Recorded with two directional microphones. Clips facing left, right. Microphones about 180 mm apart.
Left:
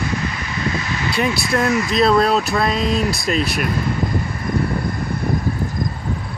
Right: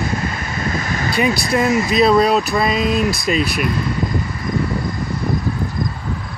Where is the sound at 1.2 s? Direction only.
5° right (ahead or behind).